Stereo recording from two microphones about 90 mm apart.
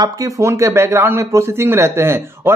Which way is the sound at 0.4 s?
30° right (ahead or behind).